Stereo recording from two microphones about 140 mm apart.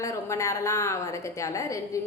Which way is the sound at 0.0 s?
20° left (ahead or behind).